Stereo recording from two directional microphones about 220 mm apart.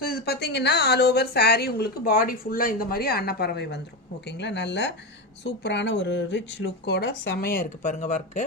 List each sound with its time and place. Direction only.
0.0 s speech: 45° left (ahead or behind)